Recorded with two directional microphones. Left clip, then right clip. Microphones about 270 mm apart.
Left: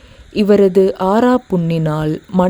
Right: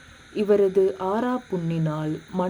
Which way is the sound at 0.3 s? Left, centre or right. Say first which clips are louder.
Left 8 dB; left.